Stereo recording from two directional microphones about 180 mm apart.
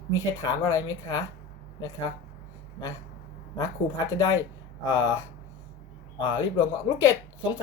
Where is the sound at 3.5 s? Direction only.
20° left (ahead or behind).